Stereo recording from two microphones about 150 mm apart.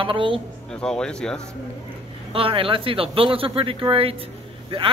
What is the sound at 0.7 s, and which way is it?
Speech, 5° left (ahead or behind).